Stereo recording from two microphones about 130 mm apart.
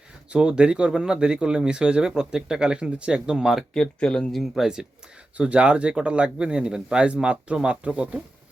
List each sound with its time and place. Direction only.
0.3 s speech: 5° right (ahead or behind)